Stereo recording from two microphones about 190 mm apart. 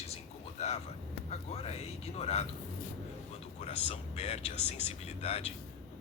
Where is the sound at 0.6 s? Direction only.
35° left (ahead or behind).